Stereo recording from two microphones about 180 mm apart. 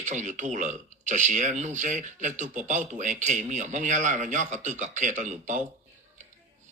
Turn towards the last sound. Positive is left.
turn(degrees=-40)  # may be behind; listen again after turning